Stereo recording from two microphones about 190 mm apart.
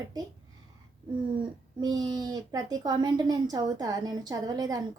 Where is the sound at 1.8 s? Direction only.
20° right (ahead or behind).